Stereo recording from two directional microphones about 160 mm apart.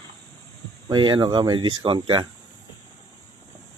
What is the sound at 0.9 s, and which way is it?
Speech, 30° right (ahead or behind).